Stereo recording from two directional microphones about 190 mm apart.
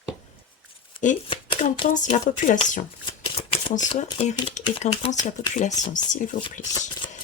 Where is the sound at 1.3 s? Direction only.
25° left (ahead or behind).